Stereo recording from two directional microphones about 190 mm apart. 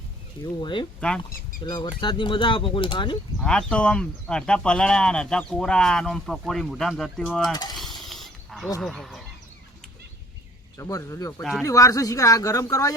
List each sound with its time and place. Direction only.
0.4 s speech: 25° left (ahead or behind)
1.3 s speech: 50° left (ahead or behind)
1.6 s speech: 25° left (ahead or behind)
3.4 s speech: 5° left (ahead or behind)
7.5 s speech: 20° left (ahead or behind)
7.8 s a sound: centre (ahead or behind)
8.8 s speech: centre (ahead or behind)
10.8 s speech: 15° left (ahead or behind)